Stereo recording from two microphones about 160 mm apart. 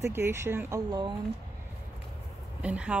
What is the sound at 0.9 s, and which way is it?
Speech, 30° right (ahead or behind).